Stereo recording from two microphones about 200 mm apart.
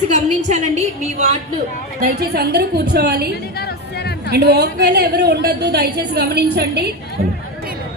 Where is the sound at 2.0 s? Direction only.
50° right (ahead or behind).